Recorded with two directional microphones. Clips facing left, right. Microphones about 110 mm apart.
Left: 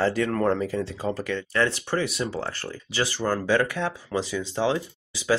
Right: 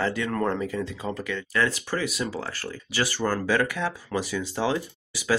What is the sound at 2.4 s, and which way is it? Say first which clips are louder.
Speech: left 2 dB; 25° left (ahead or behind).